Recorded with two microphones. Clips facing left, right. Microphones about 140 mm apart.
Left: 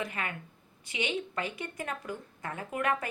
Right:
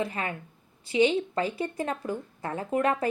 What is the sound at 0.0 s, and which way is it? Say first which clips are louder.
Speech: right 5 dB; 30° right (ahead or behind).